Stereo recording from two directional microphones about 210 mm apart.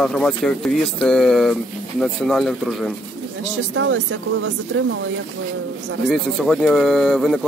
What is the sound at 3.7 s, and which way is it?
Speech, 60° right (ahead or behind).